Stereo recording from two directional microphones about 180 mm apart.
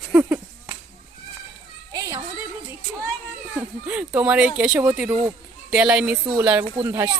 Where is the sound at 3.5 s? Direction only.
10° right (ahead or behind).